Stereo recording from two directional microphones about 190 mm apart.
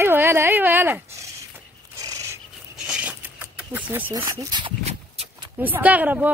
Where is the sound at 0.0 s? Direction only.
10° right (ahead or behind).